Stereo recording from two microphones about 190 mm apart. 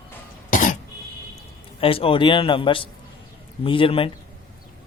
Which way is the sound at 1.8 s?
30° left (ahead or behind).